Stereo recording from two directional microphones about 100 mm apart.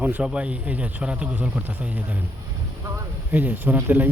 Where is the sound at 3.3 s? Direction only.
15° right (ahead or behind).